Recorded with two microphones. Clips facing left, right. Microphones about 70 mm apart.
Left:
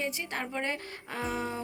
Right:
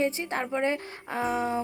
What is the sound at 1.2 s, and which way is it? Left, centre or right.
Speech, centre.